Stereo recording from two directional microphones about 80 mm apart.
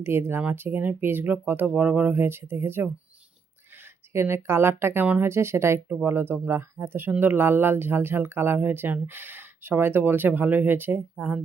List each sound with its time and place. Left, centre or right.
0.0 s speech: right
4.1 s a woman's voice: right